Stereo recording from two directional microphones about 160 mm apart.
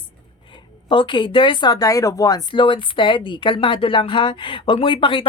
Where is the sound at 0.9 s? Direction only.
30° left (ahead or behind).